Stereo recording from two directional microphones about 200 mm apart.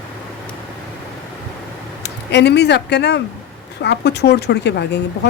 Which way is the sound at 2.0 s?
60° left (ahead or behind).